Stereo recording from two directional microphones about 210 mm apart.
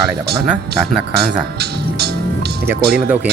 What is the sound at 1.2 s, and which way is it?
Speech, 50° right (ahead or behind).